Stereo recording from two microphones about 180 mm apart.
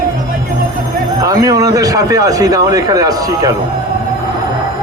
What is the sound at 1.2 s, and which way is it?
A man's voice, 20° right (ahead or behind).